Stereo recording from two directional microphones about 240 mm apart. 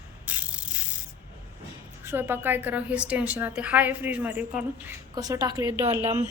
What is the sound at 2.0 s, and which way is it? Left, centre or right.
A woman's voice, centre.